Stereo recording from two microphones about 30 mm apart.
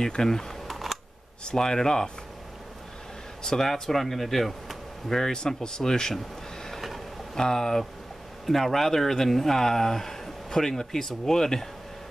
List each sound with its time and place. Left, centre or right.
0.0 s speech: left
0.7 s computer keyboard: centre
1.4 s speech: left
3.4 s speech: centre
5.2 s speech: left
7.3 s speech: centre